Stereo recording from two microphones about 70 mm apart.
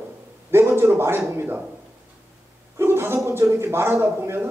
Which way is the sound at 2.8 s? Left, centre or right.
Right.